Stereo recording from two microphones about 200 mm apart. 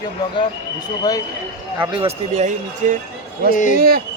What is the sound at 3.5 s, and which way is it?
Speech, 40° left (ahead or behind).